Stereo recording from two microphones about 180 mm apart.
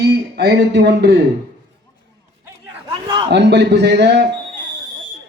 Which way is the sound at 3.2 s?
70° right (ahead or behind).